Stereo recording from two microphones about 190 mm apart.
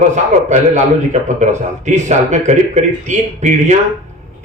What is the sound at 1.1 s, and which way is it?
Speech, 40° right (ahead or behind).